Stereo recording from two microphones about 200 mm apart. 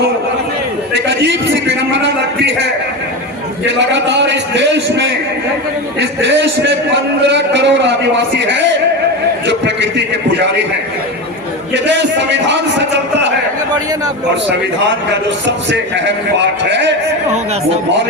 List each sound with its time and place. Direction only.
1.0 s a man's voice: 65° right (ahead or behind)
3.7 s a man's voice: 60° right (ahead or behind)
11.7 s a man's voice: 60° right (ahead or behind)
15.4 s a man's voice: 60° right (ahead or behind)